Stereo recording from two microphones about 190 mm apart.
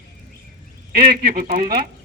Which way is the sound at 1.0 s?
50° right (ahead or behind).